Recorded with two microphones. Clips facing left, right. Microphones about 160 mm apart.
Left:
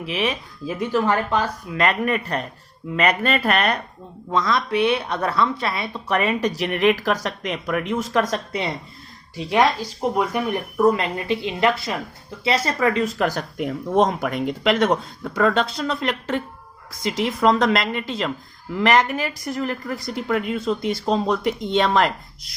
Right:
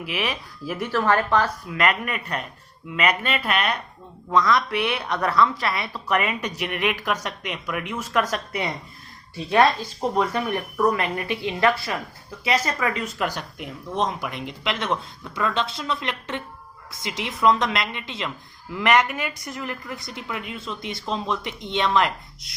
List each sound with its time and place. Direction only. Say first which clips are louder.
0.0 s a woman's voice: left 4 dB; 25° left (ahead or behind)
4.3 s a woman's voice: right 1 dB; 25° left (ahead or behind)
9.3 s a woman's voice: even; 15° left (ahead or behind); by 22.1 s 40° left (ahead or behind)